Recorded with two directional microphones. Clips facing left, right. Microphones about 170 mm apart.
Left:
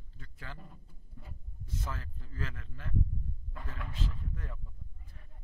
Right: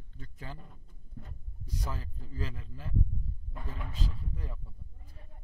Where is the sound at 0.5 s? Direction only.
5° left (ahead or behind).